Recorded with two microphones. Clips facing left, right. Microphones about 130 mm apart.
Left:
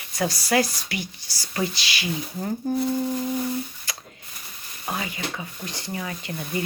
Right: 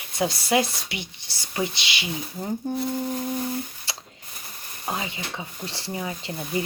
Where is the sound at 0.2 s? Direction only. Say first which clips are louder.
Even; 25° right (ahead or behind).